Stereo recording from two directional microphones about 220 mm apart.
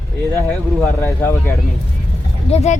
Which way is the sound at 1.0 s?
10° left (ahead or behind).